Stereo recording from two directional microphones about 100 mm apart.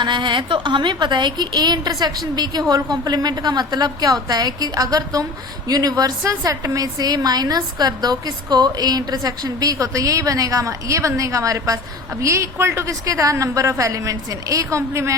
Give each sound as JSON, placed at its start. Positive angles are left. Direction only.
{"t": 0.0, "sound": "a woman's voice", "side_deg": -50}